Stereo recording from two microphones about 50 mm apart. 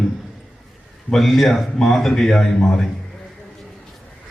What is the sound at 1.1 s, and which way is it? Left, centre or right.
A man's voice, centre.